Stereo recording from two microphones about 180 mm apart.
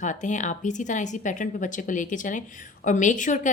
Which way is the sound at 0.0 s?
45° left (ahead or behind).